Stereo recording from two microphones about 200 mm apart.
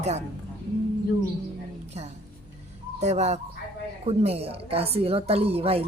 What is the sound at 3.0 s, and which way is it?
A woman's voice, 35° right (ahead or behind).